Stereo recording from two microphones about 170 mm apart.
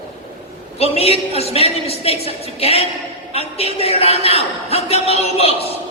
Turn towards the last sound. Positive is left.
turn(degrees=35)  # may be behind; listen again after turning